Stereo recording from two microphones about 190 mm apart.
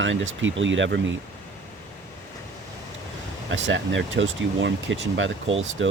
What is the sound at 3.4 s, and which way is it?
Speech, 75° right (ahead or behind).